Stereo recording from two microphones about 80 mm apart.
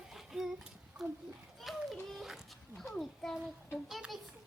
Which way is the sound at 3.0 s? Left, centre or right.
Centre.